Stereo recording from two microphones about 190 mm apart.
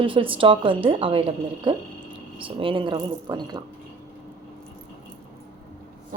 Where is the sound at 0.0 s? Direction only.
25° right (ahead or behind).